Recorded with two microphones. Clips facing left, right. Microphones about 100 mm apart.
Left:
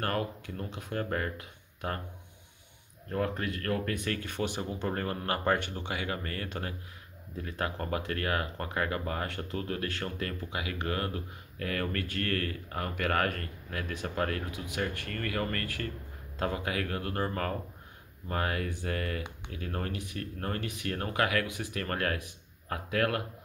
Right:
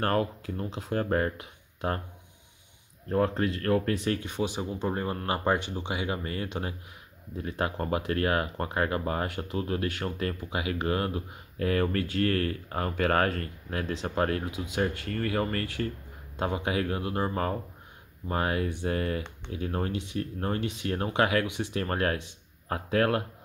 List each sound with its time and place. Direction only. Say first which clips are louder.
0.0 s speech: right 5 dB; 35° right (ahead or behind)
3.1 s speech: right 6 dB; 35° right (ahead or behind)